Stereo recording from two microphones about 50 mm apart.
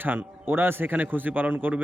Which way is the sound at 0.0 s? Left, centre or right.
Right.